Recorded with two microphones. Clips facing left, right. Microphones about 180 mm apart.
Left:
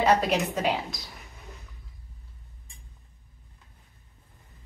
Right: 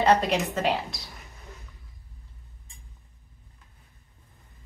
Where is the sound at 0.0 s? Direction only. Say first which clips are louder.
Right 1 dB; centre (ahead or behind).